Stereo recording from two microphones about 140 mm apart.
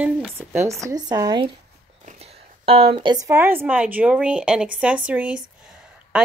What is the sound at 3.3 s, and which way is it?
Speech, 15° right (ahead or behind).